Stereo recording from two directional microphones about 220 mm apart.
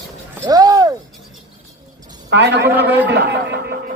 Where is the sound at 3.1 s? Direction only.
50° right (ahead or behind).